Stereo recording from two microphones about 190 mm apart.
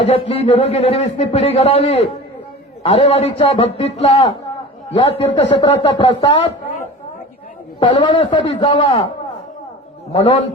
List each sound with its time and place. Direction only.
0.0 s speech: 30° left (ahead or behind)
7.8 s speech: 25° left (ahead or behind)